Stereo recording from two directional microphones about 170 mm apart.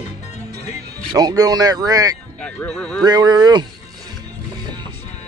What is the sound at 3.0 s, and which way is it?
Speech, 25° right (ahead or behind).